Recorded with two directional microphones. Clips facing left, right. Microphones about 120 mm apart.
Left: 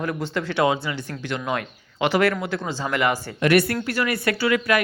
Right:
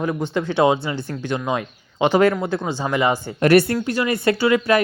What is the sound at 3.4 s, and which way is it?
Speech, 35° right (ahead or behind).